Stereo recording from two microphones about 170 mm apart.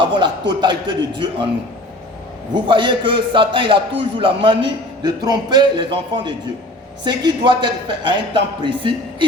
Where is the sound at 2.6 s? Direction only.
30° right (ahead or behind).